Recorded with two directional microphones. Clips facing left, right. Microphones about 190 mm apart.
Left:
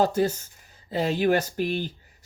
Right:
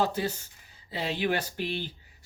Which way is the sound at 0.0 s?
45° left (ahead or behind).